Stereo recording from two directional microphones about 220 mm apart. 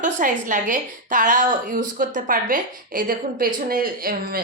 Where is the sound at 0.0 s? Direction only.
35° right (ahead or behind).